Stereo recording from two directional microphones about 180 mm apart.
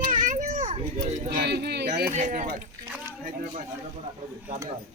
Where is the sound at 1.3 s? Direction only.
60° right (ahead or behind).